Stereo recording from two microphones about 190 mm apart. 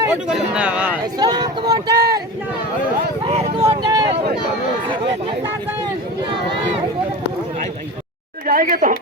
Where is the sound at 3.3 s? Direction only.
35° right (ahead or behind).